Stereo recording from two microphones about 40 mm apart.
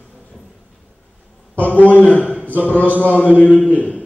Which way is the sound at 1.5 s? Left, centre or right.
Left.